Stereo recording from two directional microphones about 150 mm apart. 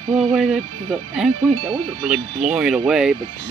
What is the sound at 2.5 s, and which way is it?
Speech, 5° right (ahead or behind).